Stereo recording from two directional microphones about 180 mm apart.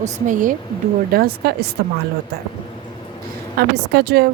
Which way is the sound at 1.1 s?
55° right (ahead or behind).